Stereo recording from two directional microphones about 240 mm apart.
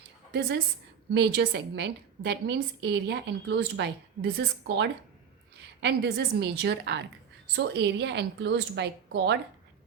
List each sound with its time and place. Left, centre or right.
0.3 s a woman's voice: right